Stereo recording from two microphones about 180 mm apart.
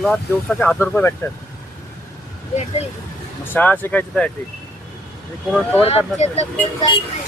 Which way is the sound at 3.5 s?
10° left (ahead or behind).